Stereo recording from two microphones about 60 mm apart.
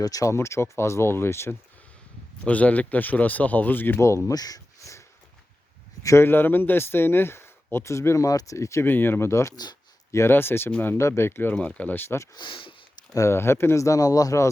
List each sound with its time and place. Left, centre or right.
0.0 s speech: left
0.3 s speech: left
2.4 s speech: left
4.3 s a sound: left
6.0 s speech: left
6.2 s speech: left
8.5 s speech: left
8.8 s speech: left
10.3 s speech: left
11.5 s speech: left
12.0 s speech: left
13.8 s speech: left